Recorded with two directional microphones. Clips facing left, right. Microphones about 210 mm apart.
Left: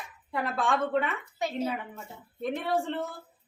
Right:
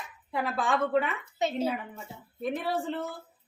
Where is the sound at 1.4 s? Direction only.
25° right (ahead or behind).